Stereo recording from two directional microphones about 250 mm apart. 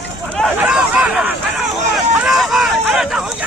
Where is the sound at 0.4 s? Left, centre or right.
Centre.